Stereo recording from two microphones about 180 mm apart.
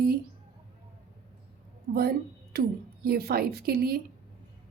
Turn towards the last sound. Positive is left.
turn(degrees=-60)  # may be behind; listen again after turning